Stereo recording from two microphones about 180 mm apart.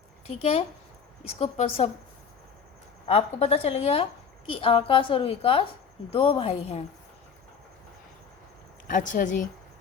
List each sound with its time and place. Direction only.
0.3 s a woman's voice: 35° left (ahead or behind)
3.1 s a woman's voice: 35° left (ahead or behind)
8.9 s speech: 45° left (ahead or behind)